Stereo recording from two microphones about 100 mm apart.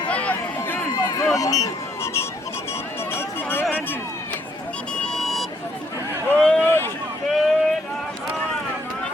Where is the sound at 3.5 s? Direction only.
20° left (ahead or behind).